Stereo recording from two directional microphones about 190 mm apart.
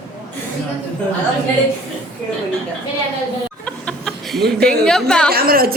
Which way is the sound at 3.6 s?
5° left (ahead or behind).